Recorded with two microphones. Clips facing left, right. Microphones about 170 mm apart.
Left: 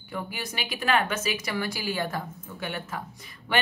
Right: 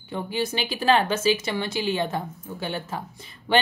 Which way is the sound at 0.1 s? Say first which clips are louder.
Right 7 dB; 25° right (ahead or behind).